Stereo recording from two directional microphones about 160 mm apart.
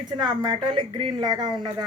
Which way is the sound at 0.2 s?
30° right (ahead or behind).